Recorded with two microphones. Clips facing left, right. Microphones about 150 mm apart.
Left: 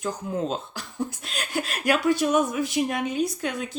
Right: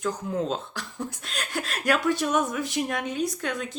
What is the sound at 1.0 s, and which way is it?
Speech, 5° left (ahead or behind).